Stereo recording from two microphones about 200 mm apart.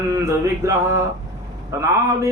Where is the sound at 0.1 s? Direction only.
15° right (ahead or behind).